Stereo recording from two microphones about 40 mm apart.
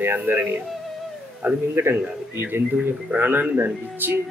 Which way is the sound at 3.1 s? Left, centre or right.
Right.